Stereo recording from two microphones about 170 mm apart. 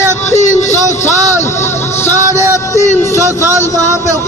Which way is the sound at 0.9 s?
15° left (ahead or behind).